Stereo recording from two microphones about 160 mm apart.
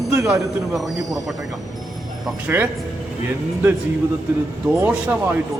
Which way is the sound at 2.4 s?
10° right (ahead or behind).